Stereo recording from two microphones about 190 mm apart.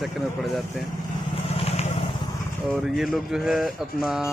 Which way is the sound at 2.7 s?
Centre (ahead or behind).